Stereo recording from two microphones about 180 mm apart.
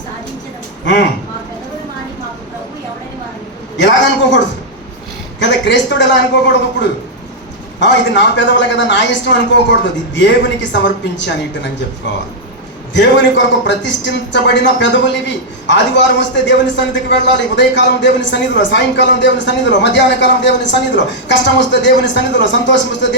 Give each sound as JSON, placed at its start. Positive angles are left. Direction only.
{"t": 3.8, "sound": "a man's voice", "side_deg": 80}
{"t": 5.4, "sound": "a man's voice", "side_deg": 80}
{"t": 7.8, "sound": "a man's voice", "side_deg": 80}
{"t": 12.9, "sound": "a man's voice", "side_deg": 90}